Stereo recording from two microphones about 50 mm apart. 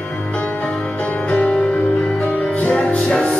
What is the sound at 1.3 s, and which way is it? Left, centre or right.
Music, left.